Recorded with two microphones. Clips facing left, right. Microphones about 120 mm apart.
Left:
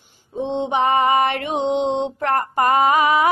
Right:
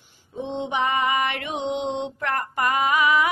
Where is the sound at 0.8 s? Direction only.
35° left (ahead or behind).